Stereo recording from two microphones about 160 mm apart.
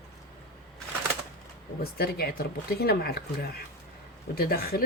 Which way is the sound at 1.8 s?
70° left (ahead or behind).